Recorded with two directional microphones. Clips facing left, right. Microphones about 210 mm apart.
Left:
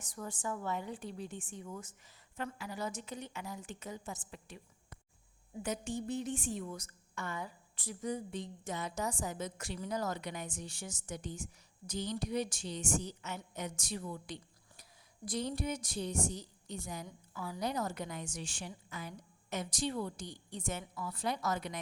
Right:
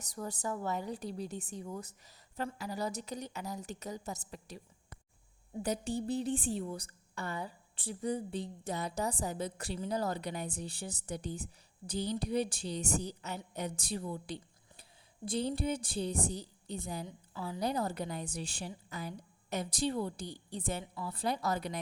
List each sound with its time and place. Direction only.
0.0 s a woman's voice: 40° right (ahead or behind)